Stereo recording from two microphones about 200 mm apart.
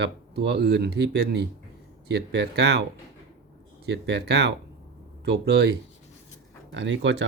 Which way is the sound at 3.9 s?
55° right (ahead or behind).